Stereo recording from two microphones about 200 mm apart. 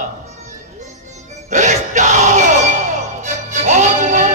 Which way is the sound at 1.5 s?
35° right (ahead or behind).